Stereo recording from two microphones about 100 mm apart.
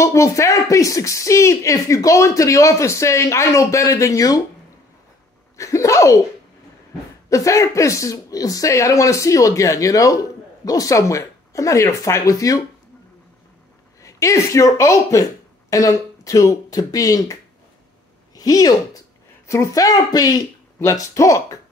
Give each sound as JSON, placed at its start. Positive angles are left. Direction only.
{"t": 0.0, "sound": "speech", "side_deg": 30}
{"t": 5.6, "sound": "speech", "side_deg": 30}
{"t": 7.2, "sound": "speech", "side_deg": 30}
{"t": 14.0, "sound": "speech", "side_deg": 30}